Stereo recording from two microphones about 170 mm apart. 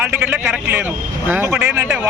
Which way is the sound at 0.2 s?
10° right (ahead or behind).